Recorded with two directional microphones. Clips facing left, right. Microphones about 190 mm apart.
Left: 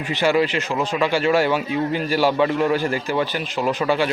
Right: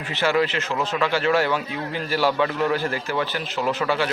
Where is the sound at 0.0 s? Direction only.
15° left (ahead or behind).